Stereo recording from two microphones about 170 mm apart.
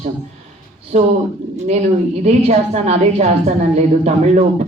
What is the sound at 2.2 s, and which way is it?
A woman's voice, 40° right (ahead or behind).